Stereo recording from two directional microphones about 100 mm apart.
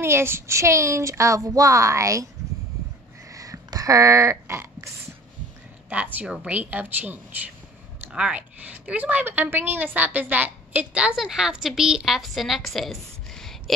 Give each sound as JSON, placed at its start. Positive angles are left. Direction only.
{"t": 0.0, "sound": "a child's voice", "side_deg": -25}
{"t": 3.3, "sound": "a sound", "side_deg": -35}
{"t": 5.9, "sound": "a woman's voice", "side_deg": -15}